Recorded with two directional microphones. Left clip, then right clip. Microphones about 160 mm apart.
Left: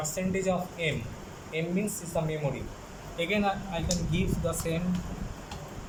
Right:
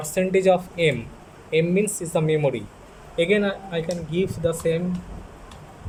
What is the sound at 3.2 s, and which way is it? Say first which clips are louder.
Speech: right 8 dB; 70° right (ahead or behind).